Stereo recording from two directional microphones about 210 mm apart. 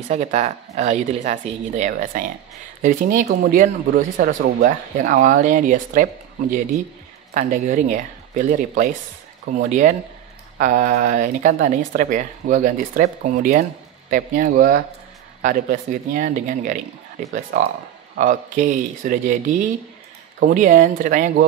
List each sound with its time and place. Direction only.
0.1 s speech: 30° right (ahead or behind)
7.3 s speech: 35° right (ahead or behind)